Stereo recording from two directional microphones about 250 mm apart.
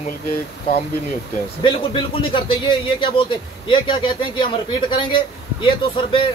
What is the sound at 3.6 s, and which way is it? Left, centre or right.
Speech, centre.